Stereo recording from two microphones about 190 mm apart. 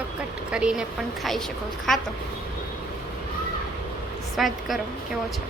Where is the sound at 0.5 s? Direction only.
5° right (ahead or behind).